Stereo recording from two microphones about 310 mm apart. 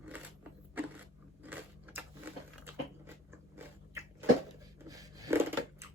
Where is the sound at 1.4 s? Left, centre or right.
Centre.